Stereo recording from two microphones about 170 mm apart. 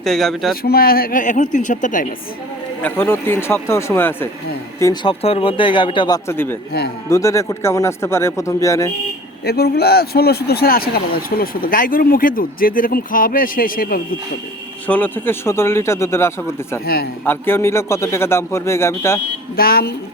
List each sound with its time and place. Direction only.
0.0 s speech: centre (ahead or behind)
0.6 s a woman's voice: 60° left (ahead or behind)
2.8 s speech: 15° left (ahead or behind)
5.0 s speech: 35° left (ahead or behind)
6.2 s speech: 15° left (ahead or behind)
9.5 s speech: 70° left (ahead or behind)
14.8 s speech: 10° left (ahead or behind)
16.8 s speech: 60° left (ahead or behind)
17.2 s speech: 15° left (ahead or behind)
19.5 s speech: 60° left (ahead or behind)